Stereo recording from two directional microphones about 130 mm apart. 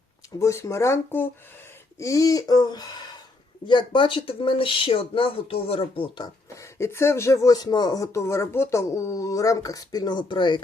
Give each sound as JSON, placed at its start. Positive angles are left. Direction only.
{"t": 0.3, "sound": "speech", "side_deg": 25}
{"t": 6.5, "sound": "speech", "side_deg": 20}